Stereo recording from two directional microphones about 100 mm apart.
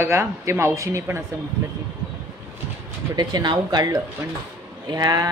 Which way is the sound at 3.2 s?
45° right (ahead or behind).